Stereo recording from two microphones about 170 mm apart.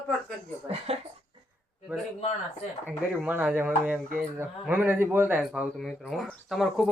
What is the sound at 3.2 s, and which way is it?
A man's voice, 5° right (ahead or behind).